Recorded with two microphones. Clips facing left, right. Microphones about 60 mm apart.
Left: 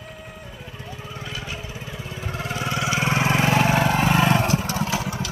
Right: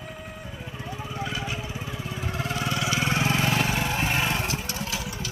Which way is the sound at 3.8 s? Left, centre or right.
Left.